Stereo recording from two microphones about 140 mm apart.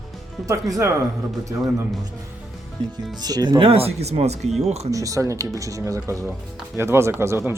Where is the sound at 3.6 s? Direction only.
45° right (ahead or behind).